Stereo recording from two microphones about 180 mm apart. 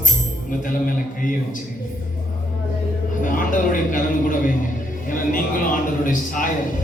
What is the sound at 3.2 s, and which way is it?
Music, 50° left (ahead or behind).